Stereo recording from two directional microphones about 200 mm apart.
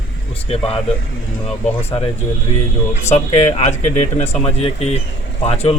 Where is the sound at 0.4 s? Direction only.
30° left (ahead or behind).